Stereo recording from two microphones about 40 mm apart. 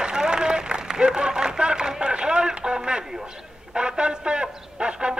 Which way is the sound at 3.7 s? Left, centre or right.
Right.